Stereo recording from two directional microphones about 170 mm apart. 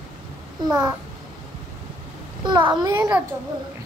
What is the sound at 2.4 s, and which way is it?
Speech, 25° right (ahead or behind).